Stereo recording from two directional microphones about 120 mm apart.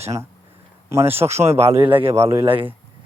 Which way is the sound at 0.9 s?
20° right (ahead or behind).